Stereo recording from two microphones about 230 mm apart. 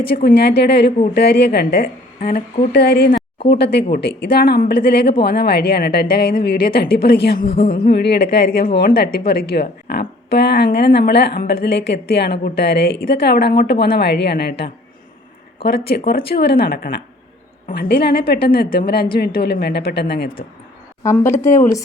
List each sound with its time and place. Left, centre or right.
0.2 s speech: left
7.4 s speech: left
7.7 s speech: left
21.0 s speech: centre